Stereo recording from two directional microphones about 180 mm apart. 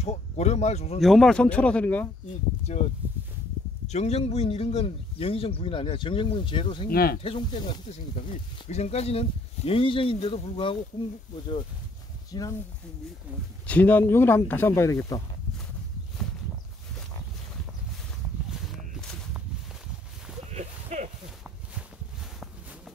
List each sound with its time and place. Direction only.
0.0 s speech: 35° left (ahead or behind)
1.0 s speech: centre (ahead or behind)
2.7 s speech: 40° left (ahead or behind)
6.9 s speech: 55° left (ahead or behind)
7.2 s speech: 25° left (ahead or behind)
12.3 s speech: 20° left (ahead or behind)
13.7 s speech: 10° left (ahead or behind)
18.7 s a sound: 5° left (ahead or behind)
20.5 s a sound: 40° right (ahead or behind)